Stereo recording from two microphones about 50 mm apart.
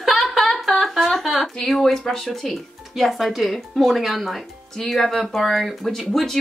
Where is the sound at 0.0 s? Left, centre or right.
Centre.